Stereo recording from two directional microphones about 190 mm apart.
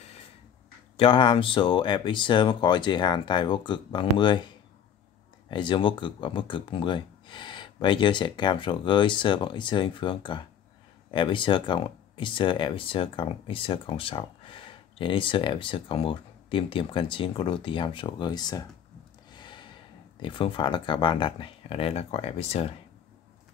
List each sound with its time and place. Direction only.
0.9 s speech: 25° left (ahead or behind)
5.5 s speech: 25° left (ahead or behind)
19.3 s gasp: 25° left (ahead or behind)
20.2 s speech: 25° left (ahead or behind)